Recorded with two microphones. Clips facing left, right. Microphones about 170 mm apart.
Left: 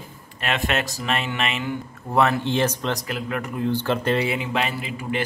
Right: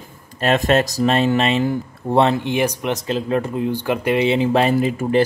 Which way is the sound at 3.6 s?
15° right (ahead or behind).